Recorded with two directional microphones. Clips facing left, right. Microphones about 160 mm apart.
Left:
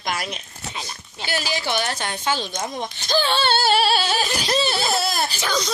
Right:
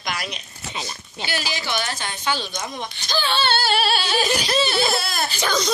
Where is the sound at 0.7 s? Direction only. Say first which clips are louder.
Right 2 dB; 5° right (ahead or behind).